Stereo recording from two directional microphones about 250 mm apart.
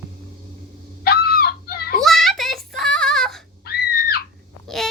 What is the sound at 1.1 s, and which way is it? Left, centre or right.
Fowl, left.